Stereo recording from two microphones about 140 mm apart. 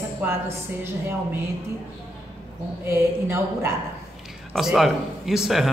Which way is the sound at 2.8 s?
15° right (ahead or behind).